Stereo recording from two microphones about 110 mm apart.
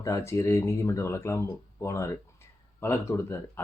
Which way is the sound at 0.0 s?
30° left (ahead or behind).